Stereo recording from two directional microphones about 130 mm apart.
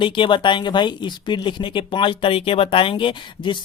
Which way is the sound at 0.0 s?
40° left (ahead or behind).